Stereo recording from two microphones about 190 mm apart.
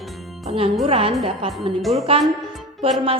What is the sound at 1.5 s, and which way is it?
Speech, centre (ahead or behind).